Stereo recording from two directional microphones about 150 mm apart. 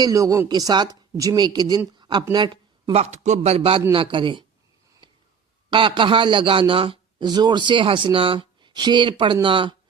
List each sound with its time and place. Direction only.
0.0 s speech: 20° right (ahead or behind)
2.0 s a sound: 30° right (ahead or behind)
2.9 s a man's voice: 50° right (ahead or behind); by 4.4 s 35° right (ahead or behind)
5.7 s a man's voice: 35° right (ahead or behind)